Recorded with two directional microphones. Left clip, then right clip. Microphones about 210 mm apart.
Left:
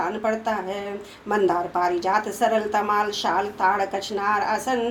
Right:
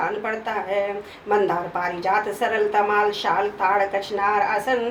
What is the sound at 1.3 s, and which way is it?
A woman's voice, 50° left (ahead or behind).